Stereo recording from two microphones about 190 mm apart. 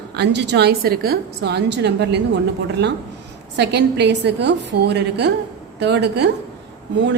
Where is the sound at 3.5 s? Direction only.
65° right (ahead or behind).